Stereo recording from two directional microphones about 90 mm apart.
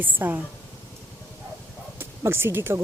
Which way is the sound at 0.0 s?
20° right (ahead or behind).